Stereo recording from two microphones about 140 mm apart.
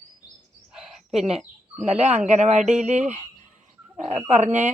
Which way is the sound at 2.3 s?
55° right (ahead or behind).